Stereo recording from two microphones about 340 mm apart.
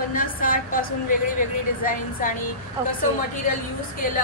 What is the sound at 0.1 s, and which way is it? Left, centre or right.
Speech, left.